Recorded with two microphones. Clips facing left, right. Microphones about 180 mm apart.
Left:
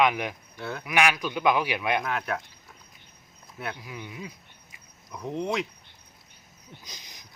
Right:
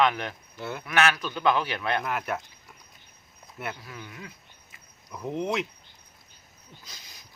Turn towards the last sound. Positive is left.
turn(degrees=20)  # may be behind; listen again after turning